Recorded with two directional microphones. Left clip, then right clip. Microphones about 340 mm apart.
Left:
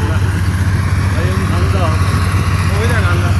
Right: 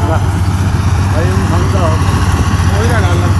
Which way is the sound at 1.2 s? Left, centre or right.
Centre.